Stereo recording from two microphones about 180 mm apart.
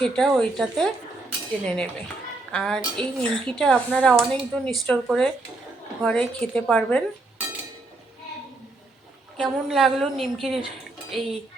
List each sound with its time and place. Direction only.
0.0 s a woman's voice: 5° left (ahead or behind)
9.4 s a woman's voice: centre (ahead or behind)